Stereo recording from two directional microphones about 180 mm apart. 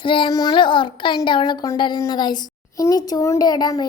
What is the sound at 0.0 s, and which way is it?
A child's voice, 30° left (ahead or behind).